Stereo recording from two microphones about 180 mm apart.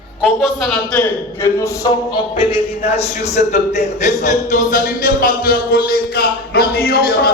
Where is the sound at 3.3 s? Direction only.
40° left (ahead or behind).